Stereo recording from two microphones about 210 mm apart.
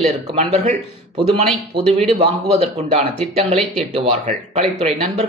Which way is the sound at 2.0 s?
30° right (ahead or behind).